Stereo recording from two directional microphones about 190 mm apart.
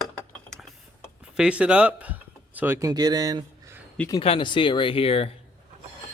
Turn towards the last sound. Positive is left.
turn(degrees=30)  # may be behind; listen again after turning